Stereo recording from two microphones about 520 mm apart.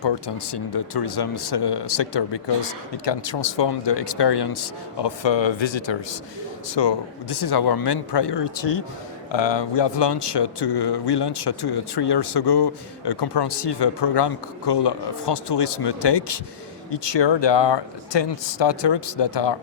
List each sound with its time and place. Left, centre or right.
0.0 s speech: left